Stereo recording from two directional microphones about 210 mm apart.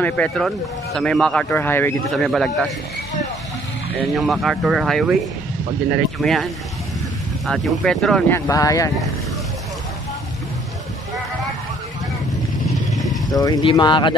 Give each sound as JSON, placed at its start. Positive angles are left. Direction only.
{"t": 0.0, "sound": "speech", "side_deg": 5}
{"t": 4.1, "sound": "speech", "side_deg": 0}
{"t": 8.5, "sound": "speech", "side_deg": 15}
{"t": 12.9, "sound": "vehicle", "side_deg": 0}
{"t": 13.3, "sound": "speech", "side_deg": 20}